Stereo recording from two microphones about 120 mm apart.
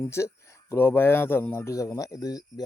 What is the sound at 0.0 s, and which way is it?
Speech, 25° left (ahead or behind).